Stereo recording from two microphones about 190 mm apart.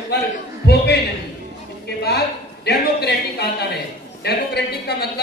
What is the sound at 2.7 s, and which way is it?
A man's voice, 60° left (ahead or behind).